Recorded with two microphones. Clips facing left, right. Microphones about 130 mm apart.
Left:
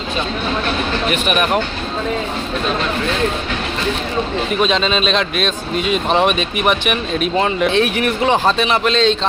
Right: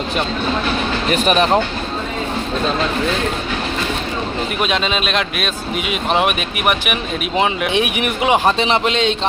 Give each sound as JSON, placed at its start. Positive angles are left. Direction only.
{"t": 1.1, "sound": "speech", "side_deg": -35}
{"t": 4.6, "sound": "speech", "side_deg": -5}